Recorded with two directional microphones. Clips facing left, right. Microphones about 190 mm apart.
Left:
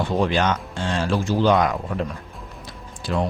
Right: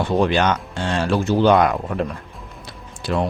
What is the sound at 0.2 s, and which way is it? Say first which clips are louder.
Speech: right 3 dB; 65° right (ahead or behind).